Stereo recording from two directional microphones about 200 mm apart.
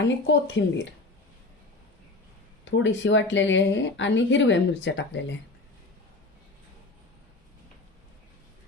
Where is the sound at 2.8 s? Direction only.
65° left (ahead or behind).